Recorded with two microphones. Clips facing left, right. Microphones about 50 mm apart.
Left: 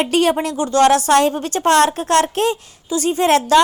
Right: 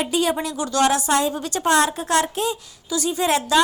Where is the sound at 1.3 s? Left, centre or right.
Left.